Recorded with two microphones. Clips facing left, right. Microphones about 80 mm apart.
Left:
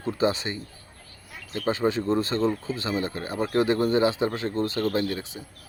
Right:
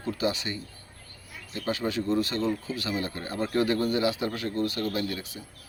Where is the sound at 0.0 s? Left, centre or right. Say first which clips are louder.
Left 4 dB; left.